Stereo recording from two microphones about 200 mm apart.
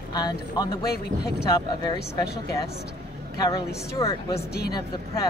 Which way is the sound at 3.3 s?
20° left (ahead or behind).